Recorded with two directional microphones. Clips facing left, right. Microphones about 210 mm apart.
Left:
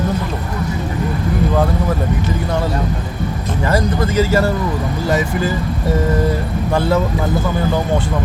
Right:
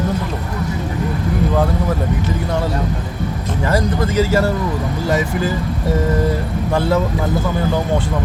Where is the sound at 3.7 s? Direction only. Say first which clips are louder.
Left 1 dB; 5° right (ahead or behind).